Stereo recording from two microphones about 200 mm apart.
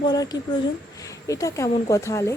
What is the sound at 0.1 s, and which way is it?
Speech, 20° left (ahead or behind).